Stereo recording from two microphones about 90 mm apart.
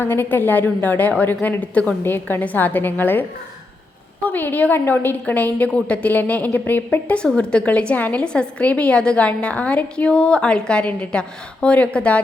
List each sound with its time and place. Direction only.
0.0 s a woman's voice: 25° left (ahead or behind)
2.0 s a woman's voice: 25° left (ahead or behind)
7.2 s a woman's voice: 10° left (ahead or behind)